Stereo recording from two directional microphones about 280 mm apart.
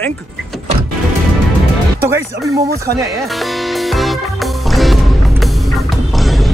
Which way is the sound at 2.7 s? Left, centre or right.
Right.